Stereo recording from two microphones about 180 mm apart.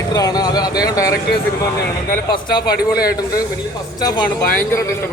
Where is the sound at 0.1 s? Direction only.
20° left (ahead or behind).